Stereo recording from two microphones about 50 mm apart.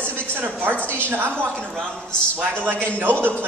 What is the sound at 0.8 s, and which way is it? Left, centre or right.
Speech, left.